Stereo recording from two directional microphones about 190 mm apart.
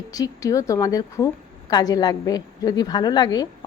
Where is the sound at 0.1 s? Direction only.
20° left (ahead or behind).